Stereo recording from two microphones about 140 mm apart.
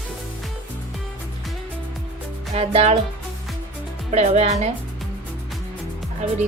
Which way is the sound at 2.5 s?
45° right (ahead or behind).